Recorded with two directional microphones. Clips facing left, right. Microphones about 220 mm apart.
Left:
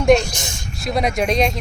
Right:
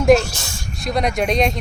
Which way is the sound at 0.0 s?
5° right (ahead or behind).